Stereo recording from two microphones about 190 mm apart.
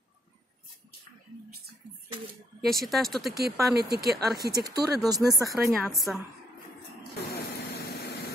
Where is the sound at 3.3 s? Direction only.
55° right (ahead or behind).